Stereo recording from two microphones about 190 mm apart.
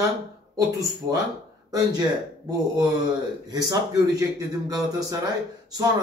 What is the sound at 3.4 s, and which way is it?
Speech, 20° right (ahead or behind).